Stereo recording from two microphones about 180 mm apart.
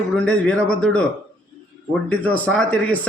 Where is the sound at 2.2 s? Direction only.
10° left (ahead or behind).